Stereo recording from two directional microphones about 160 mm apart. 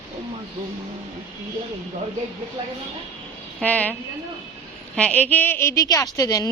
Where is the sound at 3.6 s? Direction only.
10° left (ahead or behind).